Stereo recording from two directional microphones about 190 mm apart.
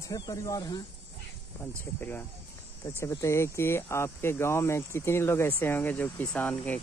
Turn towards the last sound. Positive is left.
turn(degrees=10)  # may be behind; listen again after turning